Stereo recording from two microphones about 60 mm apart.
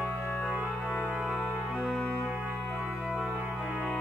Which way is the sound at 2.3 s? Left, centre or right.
Centre.